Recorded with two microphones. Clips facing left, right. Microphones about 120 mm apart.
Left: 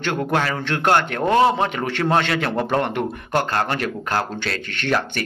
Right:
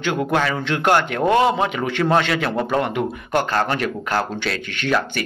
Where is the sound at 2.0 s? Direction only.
15° left (ahead or behind).